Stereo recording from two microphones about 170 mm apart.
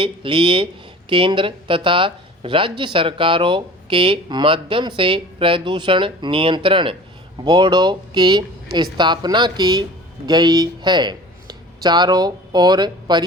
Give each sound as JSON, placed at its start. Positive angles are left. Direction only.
{"t": 0.0, "sound": "speech", "side_deg": -30}